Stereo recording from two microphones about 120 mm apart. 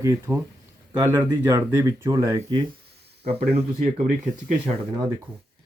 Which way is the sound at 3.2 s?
55° right (ahead or behind).